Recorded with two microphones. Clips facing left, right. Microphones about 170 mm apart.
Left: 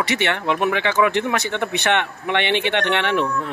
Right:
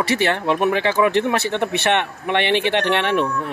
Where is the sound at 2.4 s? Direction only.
20° left (ahead or behind).